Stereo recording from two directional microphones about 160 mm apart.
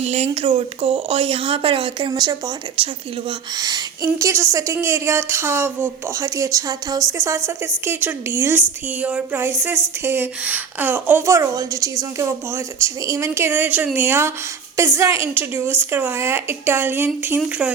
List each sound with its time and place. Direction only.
0.0 s a woman's voice: 40° right (ahead or behind); by 17.7 s 10° right (ahead or behind)